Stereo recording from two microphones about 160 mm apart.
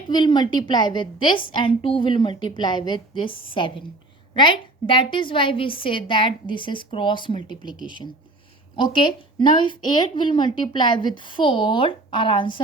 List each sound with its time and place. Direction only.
0.1 s a woman's voice: 25° left (ahead or behind)